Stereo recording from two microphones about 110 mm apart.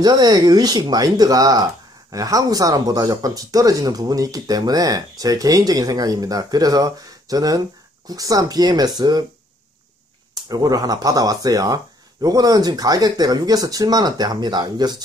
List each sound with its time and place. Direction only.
0.0 s speech: 40° right (ahead or behind)
10.5 s speech: 35° right (ahead or behind)